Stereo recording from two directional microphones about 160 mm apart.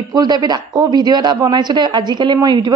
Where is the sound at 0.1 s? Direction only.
25° right (ahead or behind).